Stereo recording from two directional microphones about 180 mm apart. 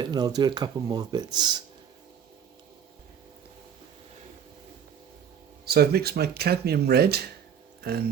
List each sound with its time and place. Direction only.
0.0 s speech: 25° right (ahead or behind)
5.6 s speech: 60° right (ahead or behind)
7.8 s a sound: 60° right (ahead or behind)